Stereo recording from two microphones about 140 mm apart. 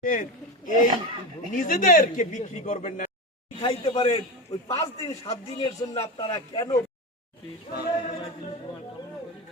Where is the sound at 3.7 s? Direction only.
35° left (ahead or behind).